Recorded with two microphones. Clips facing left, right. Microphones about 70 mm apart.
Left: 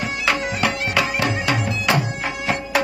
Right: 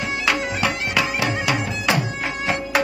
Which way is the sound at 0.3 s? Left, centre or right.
Centre.